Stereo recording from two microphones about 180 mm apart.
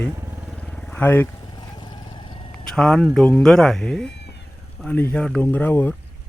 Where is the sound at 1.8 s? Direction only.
25° left (ahead or behind).